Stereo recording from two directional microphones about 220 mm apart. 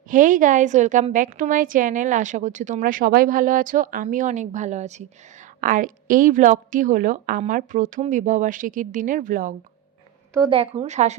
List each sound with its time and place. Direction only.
0.1 s a woman's voice: 35° right (ahead or behind)
10.3 s a woman's voice: 20° right (ahead or behind)